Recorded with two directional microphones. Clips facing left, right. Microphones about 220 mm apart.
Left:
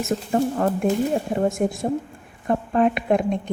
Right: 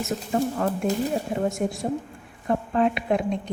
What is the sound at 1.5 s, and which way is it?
A woman's voice, 50° left (ahead or behind).